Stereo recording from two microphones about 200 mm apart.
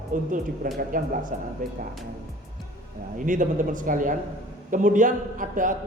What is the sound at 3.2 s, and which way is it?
Speech, 40° right (ahead or behind).